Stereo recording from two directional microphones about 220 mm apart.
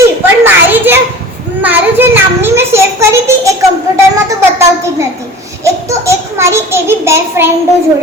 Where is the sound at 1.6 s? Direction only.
10° right (ahead or behind).